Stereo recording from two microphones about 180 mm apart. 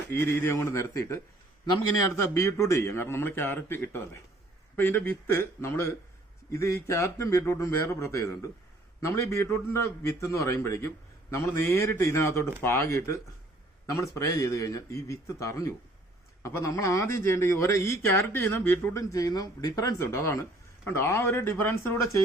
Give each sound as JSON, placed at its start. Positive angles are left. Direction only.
{"t": 0.1, "sound": "a man's voice", "side_deg": 10}
{"t": 2.3, "sound": "a man's voice", "side_deg": 15}